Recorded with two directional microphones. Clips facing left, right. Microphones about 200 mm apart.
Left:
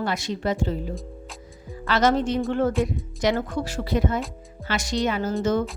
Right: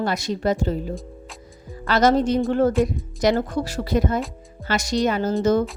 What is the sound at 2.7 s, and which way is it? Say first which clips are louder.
Speech: right 4 dB; centre (ahead or behind).